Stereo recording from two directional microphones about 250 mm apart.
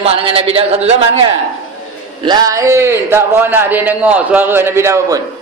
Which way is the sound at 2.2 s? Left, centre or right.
Centre.